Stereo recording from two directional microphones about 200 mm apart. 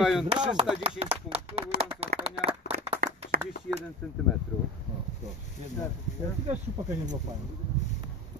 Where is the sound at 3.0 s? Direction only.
50° right (ahead or behind).